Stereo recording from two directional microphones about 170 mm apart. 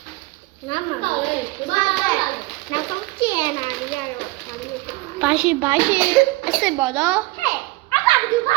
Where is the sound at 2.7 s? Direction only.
20° left (ahead or behind).